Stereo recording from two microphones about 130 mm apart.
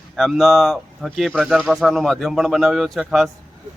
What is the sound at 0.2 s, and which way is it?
Speech, centre (ahead or behind).